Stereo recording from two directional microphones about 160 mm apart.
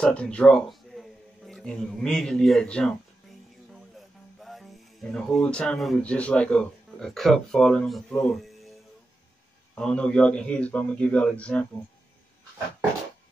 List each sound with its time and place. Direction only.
0.0 s a sound: 5° left (ahead or behind)
4.4 s speech: centre (ahead or behind)
9.8 s a man's voice: 5° left (ahead or behind)